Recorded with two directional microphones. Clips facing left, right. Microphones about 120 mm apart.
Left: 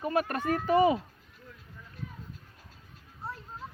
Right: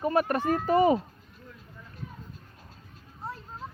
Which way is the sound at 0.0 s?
30° right (ahead or behind).